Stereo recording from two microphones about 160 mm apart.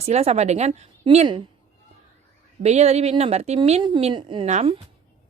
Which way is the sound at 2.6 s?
40° right (ahead or behind).